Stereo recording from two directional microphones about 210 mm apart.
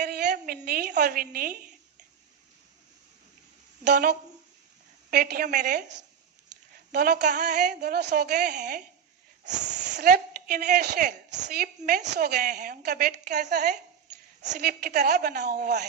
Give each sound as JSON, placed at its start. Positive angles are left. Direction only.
{"t": 0.0, "sound": "a woman's voice", "side_deg": -50}
{"t": 3.8, "sound": "a woman's voice", "side_deg": -55}
{"t": 6.9, "sound": "a woman's voice", "side_deg": -45}
{"t": 7.7, "sound": "a woman's voice", "side_deg": -50}
{"t": 8.5, "sound": "a woman's voice", "side_deg": -35}
{"t": 10.0, "sound": "a woman's voice", "side_deg": -45}
{"t": 11.8, "sound": "a woman's voice", "side_deg": -35}
{"t": 12.0, "sound": "a woman's voice", "side_deg": -50}